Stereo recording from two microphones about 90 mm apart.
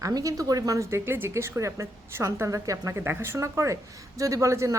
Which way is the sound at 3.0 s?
25° right (ahead or behind).